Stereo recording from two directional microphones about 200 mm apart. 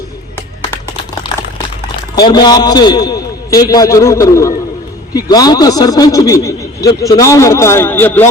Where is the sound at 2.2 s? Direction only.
20° left (ahead or behind).